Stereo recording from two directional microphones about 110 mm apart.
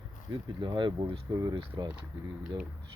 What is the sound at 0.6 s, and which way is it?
Speech, 45° right (ahead or behind).